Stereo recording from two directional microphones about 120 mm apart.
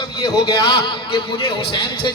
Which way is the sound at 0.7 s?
50° left (ahead or behind).